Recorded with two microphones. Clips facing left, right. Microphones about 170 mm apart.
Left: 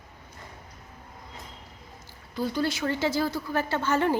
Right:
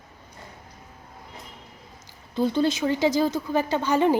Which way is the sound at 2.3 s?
25° right (ahead or behind).